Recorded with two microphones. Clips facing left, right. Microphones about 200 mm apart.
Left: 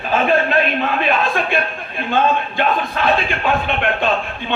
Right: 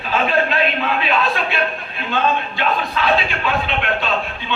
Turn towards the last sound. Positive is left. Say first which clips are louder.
# left 3 dB
turn(degrees=55)  # may be behind; listen again after turning